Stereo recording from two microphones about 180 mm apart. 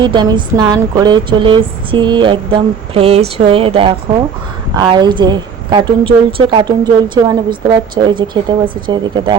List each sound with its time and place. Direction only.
0.0 s speech: 25° right (ahead or behind)